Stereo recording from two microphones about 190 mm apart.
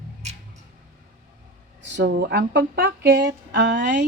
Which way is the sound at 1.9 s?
65° right (ahead or behind).